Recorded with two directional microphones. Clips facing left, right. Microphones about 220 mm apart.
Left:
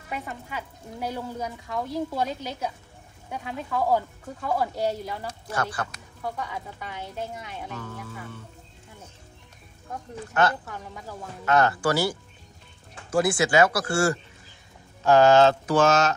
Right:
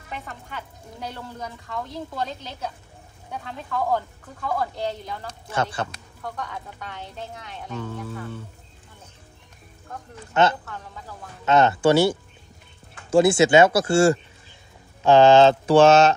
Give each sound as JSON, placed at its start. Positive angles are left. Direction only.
{"t": 0.1, "sound": "a woman's voice", "side_deg": 10}
{"t": 5.5, "sound": "mantra", "side_deg": -25}
{"t": 6.3, "sound": "speech", "side_deg": 5}
{"t": 10.3, "sound": "mantra", "side_deg": -25}